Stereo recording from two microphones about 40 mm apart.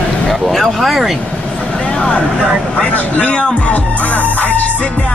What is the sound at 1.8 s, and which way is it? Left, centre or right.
Vehicle, left.